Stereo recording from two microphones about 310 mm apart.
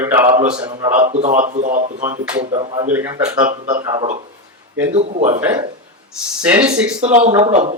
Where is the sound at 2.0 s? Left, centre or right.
Centre.